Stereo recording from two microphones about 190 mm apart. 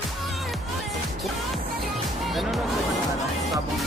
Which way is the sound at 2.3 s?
Centre (ahead or behind).